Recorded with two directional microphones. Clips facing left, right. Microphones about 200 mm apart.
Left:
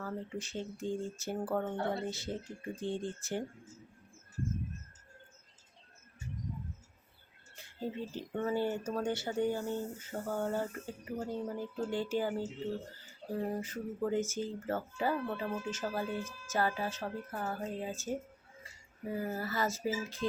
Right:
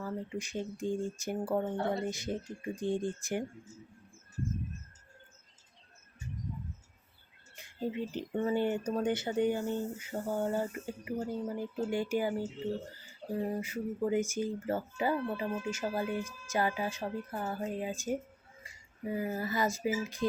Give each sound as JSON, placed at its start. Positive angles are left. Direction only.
{"t": 0.0, "sound": "speech", "side_deg": -10}
{"t": 7.5, "sound": "speech", "side_deg": -15}
{"t": 13.6, "sound": "speech", "side_deg": -10}